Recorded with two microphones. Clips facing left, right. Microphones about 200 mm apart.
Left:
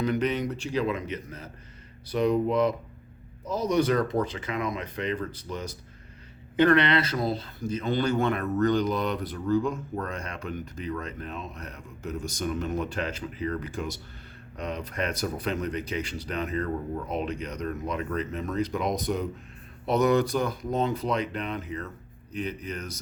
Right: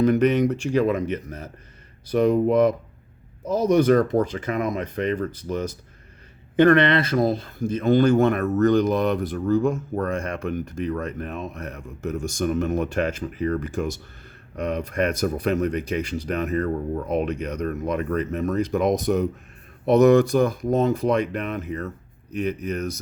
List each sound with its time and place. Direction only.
0.0 s speech: 50° right (ahead or behind)